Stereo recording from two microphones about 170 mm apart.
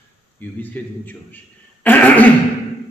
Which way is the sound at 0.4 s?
10° left (ahead or behind).